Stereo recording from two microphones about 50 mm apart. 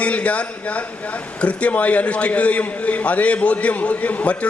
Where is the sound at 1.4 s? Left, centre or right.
Left.